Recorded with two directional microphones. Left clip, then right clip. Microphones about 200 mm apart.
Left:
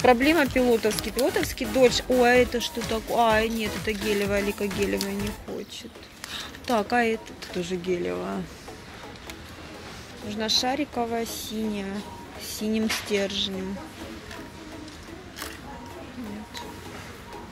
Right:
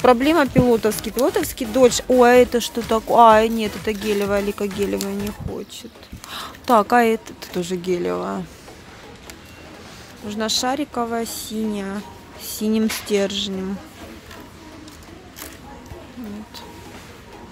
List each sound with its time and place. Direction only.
0.0 s speech: 20° right (ahead or behind)
6.3 s speech: 25° right (ahead or behind)
10.3 s speech: 25° right (ahead or behind)